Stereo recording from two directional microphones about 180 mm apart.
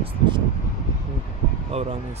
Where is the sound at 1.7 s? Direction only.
35° right (ahead or behind).